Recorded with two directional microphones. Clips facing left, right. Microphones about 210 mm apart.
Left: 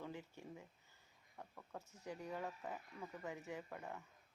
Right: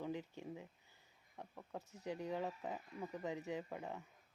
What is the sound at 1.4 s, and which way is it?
Speech, 15° right (ahead or behind).